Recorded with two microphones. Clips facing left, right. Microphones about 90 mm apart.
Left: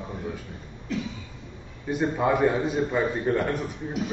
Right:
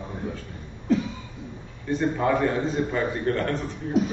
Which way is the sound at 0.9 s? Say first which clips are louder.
Right 8 dB; 35° right (ahead or behind).